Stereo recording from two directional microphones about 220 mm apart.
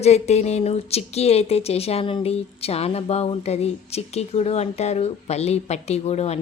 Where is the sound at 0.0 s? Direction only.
30° left (ahead or behind).